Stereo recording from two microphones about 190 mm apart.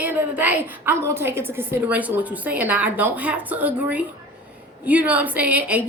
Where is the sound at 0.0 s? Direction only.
10° right (ahead or behind).